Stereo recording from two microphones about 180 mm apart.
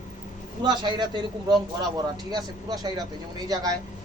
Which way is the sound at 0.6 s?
25° right (ahead or behind).